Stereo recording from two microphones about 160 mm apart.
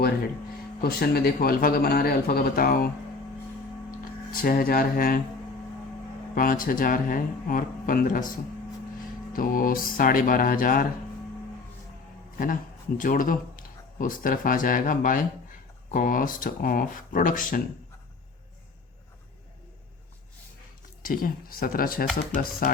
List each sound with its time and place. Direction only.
0.8 s speech: 70° left (ahead or behind)
4.3 s speech: 60° left (ahead or behind)
6.3 s speech: 60° left (ahead or behind)
9.3 s speech: 60° left (ahead or behind)
13.0 s speech: 55° left (ahead or behind)
21.0 s speech: 60° left (ahead or behind)